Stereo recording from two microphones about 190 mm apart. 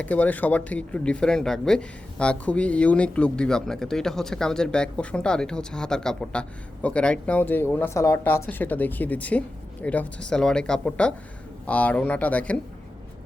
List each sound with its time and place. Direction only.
0.0 s speech: 10° left (ahead or behind)